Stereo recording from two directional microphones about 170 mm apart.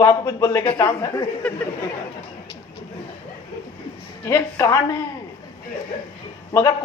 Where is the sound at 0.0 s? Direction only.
20° left (ahead or behind).